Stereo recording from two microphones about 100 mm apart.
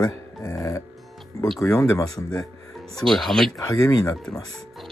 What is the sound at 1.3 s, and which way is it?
Music, 35° left (ahead or behind).